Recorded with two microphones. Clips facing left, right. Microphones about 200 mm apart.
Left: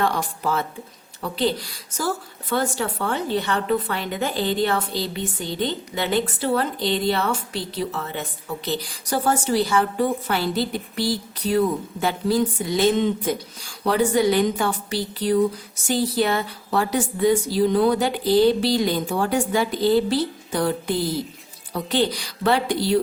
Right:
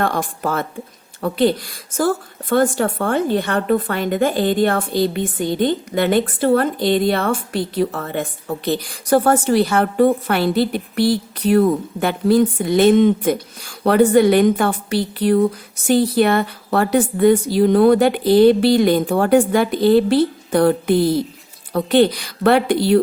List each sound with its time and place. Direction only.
0.0 s a woman's voice: 55° right (ahead or behind)